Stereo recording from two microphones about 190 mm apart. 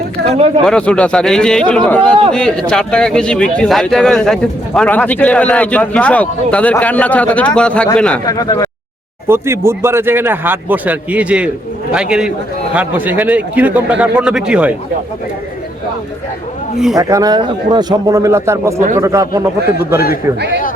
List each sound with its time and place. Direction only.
0.6 s speech: 5° left (ahead or behind)
8.2 s speech: 20° left (ahead or behind)
9.2 s speech: 15° right (ahead or behind)
16.7 s speech: centre (ahead or behind)
17.0 s speech: 20° right (ahead or behind)